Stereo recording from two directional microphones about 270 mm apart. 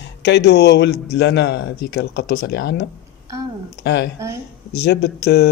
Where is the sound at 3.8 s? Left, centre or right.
Left.